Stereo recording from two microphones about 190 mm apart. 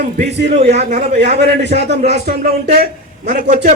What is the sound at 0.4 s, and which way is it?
Speech, 35° right (ahead or behind).